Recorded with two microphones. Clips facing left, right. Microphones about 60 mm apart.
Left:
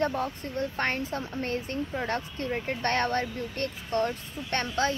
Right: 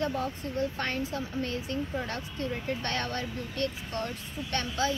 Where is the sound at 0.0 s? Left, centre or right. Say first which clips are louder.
Left 2 dB; left.